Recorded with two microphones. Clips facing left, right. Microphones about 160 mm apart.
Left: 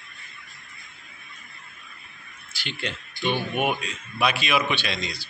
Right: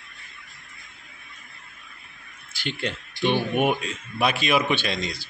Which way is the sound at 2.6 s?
50° right (ahead or behind).